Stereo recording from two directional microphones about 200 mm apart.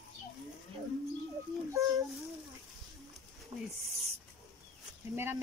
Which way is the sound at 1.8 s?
15° right (ahead or behind).